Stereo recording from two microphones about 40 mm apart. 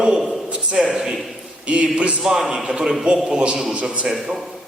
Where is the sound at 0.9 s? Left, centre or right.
Centre.